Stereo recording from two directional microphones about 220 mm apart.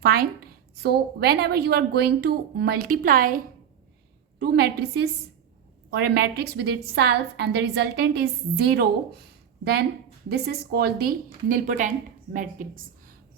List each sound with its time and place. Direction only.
0.0 s a woman's voice: 45° right (ahead or behind)
10.2 s a woman's voice: 45° right (ahead or behind)